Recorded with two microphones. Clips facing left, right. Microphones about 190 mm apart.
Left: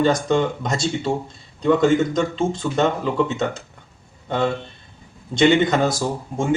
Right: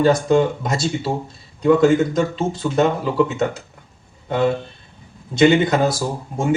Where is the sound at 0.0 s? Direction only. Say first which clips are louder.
Right 3 dB; 5° right (ahead or behind).